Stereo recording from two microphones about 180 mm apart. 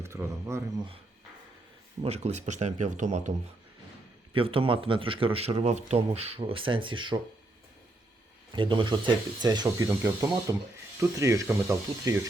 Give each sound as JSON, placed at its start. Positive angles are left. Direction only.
{"t": 0.0, "sound": "speech", "side_deg": -15}
{"t": 2.0, "sound": "speech", "side_deg": -35}
{"t": 4.4, "sound": "speech", "side_deg": -30}
{"t": 8.5, "sound": "speech", "side_deg": -25}